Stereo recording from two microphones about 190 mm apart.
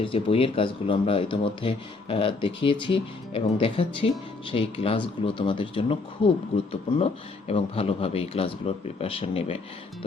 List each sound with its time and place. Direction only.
0.0 s speech: 30° left (ahead or behind)